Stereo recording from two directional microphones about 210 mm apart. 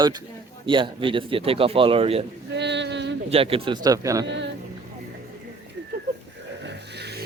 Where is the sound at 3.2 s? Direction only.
25° right (ahead or behind).